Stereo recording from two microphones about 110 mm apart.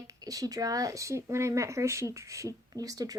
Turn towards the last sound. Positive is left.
turn(degrees=-35)  # may be behind; listen again after turning